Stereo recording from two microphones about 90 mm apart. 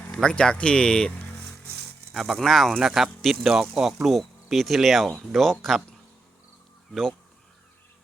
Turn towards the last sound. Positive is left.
turn(degrees=5)  # may be behind; listen again after turning